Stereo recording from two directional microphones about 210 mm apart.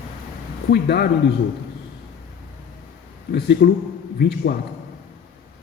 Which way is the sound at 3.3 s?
50° left (ahead or behind).